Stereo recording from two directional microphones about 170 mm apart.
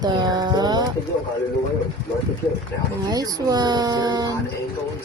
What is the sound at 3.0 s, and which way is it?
Speech, 20° right (ahead or behind).